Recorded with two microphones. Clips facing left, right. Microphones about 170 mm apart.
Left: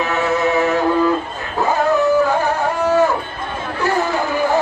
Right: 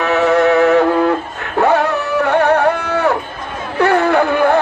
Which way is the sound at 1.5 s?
65° right (ahead or behind).